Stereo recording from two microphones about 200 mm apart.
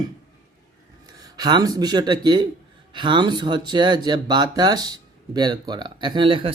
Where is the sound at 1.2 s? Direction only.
20° right (ahead or behind).